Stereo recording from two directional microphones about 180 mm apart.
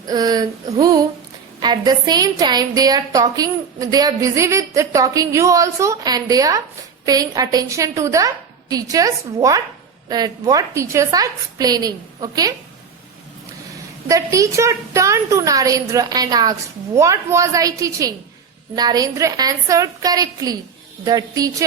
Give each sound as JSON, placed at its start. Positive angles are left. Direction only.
{"t": 0.1, "sound": "a woman's voice", "side_deg": -20}
{"t": 14.1, "sound": "a woman's voice", "side_deg": -20}